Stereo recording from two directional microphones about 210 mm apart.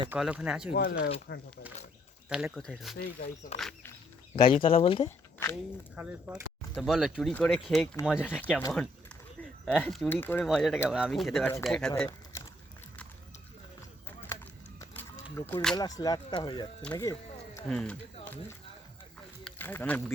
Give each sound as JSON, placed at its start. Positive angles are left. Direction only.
{"t": 0.1, "sound": "speech", "side_deg": -5}
{"t": 0.7, "sound": "speech", "side_deg": 45}
{"t": 2.3, "sound": "speech", "side_deg": 0}
{"t": 2.9, "sound": "speech", "side_deg": 45}
{"t": 3.6, "sound": "a sound", "side_deg": 5}
{"t": 4.4, "sound": "speech", "side_deg": 25}
{"t": 5.0, "sound": "a sound", "side_deg": 15}
{"t": 6.0, "sound": "speech", "side_deg": -10}
{"t": 6.6, "sound": "speech", "side_deg": 5}
{"t": 8.4, "sound": "speech", "side_deg": 10}
{"t": 14.3, "sound": "a sound", "side_deg": 15}
{"t": 15.7, "sound": "speech", "side_deg": 20}
{"t": 16.9, "sound": "a sound", "side_deg": 15}
{"t": 17.7, "sound": "speech", "side_deg": 5}